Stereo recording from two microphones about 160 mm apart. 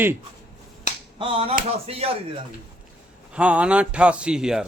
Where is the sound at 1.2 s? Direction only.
35° right (ahead or behind).